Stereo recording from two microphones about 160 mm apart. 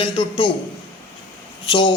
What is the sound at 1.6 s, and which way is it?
Speech, 30° left (ahead or behind).